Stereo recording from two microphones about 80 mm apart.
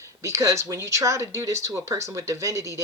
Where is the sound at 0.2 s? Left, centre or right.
Right.